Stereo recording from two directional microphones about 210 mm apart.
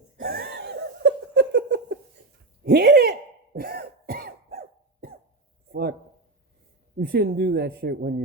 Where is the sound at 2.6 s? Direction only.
45° right (ahead or behind).